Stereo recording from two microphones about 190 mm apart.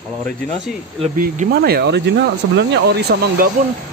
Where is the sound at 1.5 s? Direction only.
55° right (ahead or behind).